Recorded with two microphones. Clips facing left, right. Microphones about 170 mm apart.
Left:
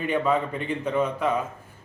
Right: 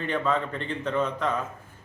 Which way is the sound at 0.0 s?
10° left (ahead or behind).